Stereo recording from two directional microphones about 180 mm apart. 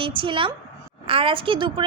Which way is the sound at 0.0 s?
30° right (ahead or behind).